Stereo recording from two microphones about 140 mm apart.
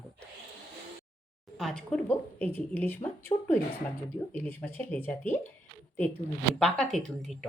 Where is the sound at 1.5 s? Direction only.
5° left (ahead or behind).